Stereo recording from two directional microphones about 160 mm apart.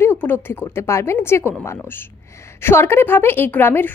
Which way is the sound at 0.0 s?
10° left (ahead or behind).